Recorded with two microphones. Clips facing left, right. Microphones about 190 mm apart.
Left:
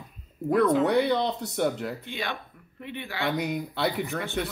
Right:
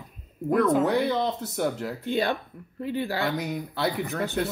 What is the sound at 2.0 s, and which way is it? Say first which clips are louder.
Speech: right 8 dB; 40° right (ahead or behind).